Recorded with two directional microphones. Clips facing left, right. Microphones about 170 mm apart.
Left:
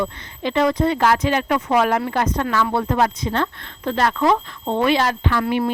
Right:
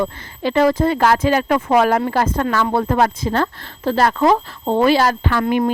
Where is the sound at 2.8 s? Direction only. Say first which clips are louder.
Right 3 dB; 50° right (ahead or behind).